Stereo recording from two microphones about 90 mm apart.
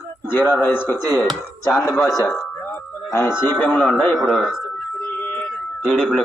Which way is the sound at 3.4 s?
20° left (ahead or behind).